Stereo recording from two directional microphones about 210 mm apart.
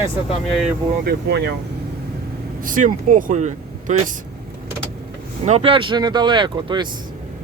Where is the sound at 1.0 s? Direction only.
50° right (ahead or behind).